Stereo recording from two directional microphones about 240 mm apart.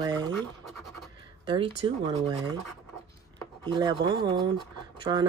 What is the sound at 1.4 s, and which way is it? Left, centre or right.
Speech, right.